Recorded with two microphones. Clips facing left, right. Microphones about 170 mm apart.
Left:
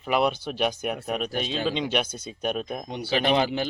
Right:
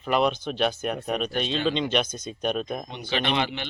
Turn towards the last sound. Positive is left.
turn(degrees=40)  # may be behind; listen again after turning